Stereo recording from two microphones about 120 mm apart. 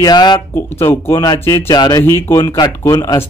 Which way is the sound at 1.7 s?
35° left (ahead or behind).